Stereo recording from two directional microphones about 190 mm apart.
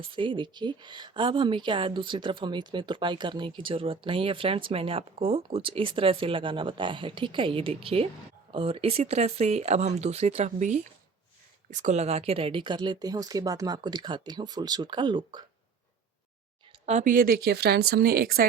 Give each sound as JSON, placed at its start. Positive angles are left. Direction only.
{"t": 0.0, "sound": "speech", "side_deg": -25}
{"t": 16.8, "sound": "a woman's voice", "side_deg": -40}